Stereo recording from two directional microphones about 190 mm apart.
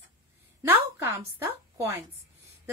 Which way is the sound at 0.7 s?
15° right (ahead or behind).